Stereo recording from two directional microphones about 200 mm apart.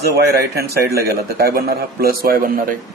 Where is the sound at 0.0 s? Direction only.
50° right (ahead or behind).